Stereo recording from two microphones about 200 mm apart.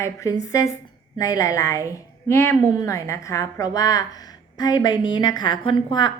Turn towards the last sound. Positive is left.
turn(degrees=20)  # may be behind; listen again after turning